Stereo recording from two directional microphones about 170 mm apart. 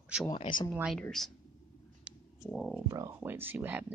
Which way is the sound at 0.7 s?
5° right (ahead or behind).